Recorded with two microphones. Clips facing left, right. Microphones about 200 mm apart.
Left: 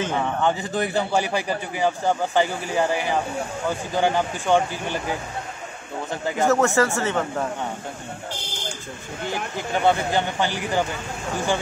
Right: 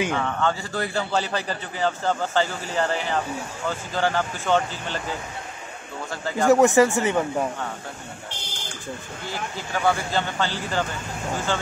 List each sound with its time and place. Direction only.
0.1 s a man's voice: 15° left (ahead or behind)
6.4 s speech: 15° right (ahead or behind)
9.3 s a man's voice: 20° left (ahead or behind)